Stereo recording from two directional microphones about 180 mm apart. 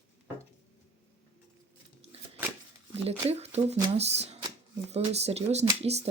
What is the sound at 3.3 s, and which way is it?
Speech, 35° right (ahead or behind).